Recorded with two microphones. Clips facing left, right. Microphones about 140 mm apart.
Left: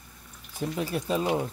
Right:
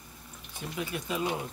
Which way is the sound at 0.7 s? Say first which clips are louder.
Left 4 dB; 35° left (ahead or behind).